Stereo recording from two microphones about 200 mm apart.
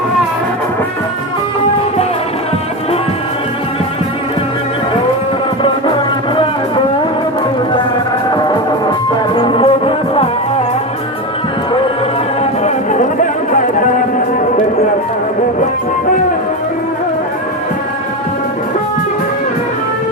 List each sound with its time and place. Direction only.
8.3 s music: 20° left (ahead or behind)
12.4 s music: 35° left (ahead or behind)